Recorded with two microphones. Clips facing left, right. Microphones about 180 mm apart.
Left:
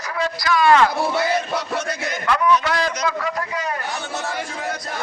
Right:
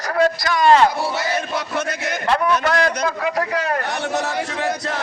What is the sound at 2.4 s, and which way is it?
A man's voice, 50° right (ahead or behind).